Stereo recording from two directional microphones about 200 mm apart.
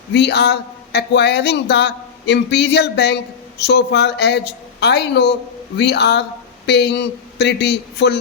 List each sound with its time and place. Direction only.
0.1 s speech: 55° left (ahead or behind)